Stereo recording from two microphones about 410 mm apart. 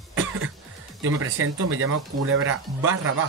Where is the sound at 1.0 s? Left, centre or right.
Right.